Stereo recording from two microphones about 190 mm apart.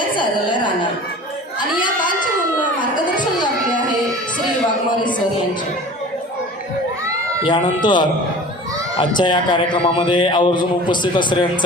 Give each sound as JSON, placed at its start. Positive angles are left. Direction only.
{"t": 0.2, "sound": "a woman's voice", "side_deg": 25}
{"t": 7.4, "sound": "a man's voice", "side_deg": 25}